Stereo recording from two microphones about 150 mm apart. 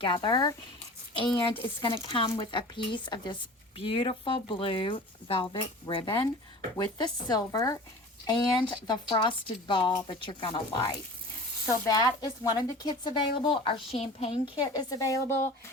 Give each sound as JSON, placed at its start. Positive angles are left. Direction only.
{"t": 0.0, "sound": "a woman's voice", "side_deg": 30}
{"t": 14.6, "sound": "a woman's voice", "side_deg": 25}